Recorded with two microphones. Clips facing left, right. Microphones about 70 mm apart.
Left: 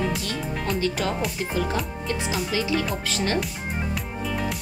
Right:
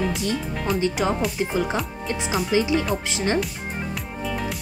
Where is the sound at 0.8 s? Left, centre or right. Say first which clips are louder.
Right 4 dB; centre.